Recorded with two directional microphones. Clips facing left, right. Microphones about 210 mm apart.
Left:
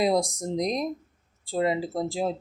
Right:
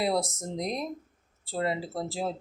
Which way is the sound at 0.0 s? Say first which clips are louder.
Left 4 dB; 15° left (ahead or behind).